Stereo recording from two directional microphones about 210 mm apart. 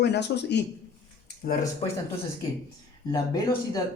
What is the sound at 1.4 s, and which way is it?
Speech, 45° left (ahead or behind).